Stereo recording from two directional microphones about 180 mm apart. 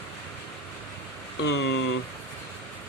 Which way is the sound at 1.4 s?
70° left (ahead or behind).